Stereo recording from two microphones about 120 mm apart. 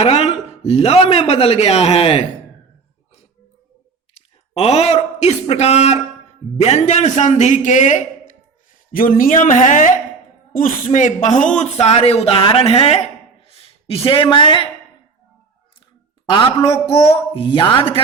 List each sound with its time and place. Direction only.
0.0 s a man's voice: 60° left (ahead or behind)
4.5 s a man's voice: 60° left (ahead or behind); by 8.0 s 85° left
9.3 s a woman's voice: 90° left
11.6 s a man's voice: 60° left (ahead or behind); by 14.7 s 45° left (ahead or behind)
16.3 s a man's voice: 40° left (ahead or behind)
16.9 s speech: 55° left (ahead or behind)